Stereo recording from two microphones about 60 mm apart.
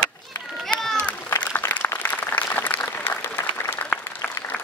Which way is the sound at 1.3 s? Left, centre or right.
Left.